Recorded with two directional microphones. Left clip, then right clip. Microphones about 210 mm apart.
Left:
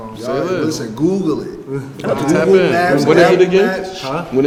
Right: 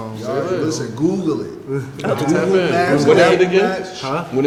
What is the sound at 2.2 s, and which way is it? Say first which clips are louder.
Speech: left 5 dB; 40° left (ahead or behind).